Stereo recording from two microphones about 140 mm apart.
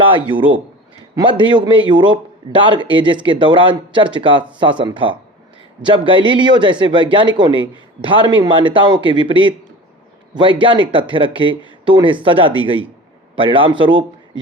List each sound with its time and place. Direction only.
0.3 s a man's voice: 35° right (ahead or behind)
10.6 s a man's voice: 35° right (ahead or behind)